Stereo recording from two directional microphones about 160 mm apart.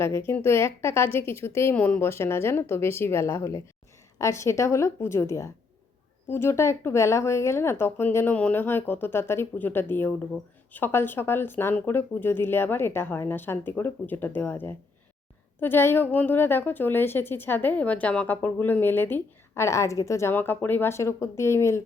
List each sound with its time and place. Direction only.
0.0 s a woman's voice: 15° left (ahead or behind)